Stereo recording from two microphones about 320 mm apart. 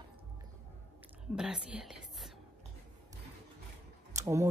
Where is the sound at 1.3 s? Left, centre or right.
Centre.